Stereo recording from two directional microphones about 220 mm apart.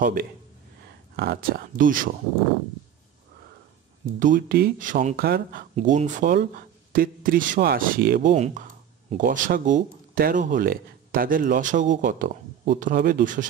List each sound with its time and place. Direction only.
0.0 s speech: 40° right (ahead or behind)
4.0 s speech: 35° right (ahead or behind)